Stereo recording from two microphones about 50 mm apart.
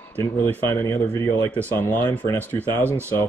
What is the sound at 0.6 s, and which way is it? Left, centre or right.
Speech, left.